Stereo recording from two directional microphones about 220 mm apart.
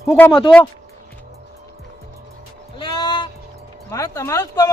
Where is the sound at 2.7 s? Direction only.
20° left (ahead or behind).